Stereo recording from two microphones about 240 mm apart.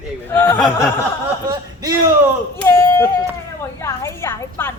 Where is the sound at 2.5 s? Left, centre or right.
Centre.